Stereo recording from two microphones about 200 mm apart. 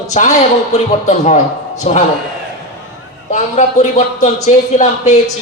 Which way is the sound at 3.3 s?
35° left (ahead or behind).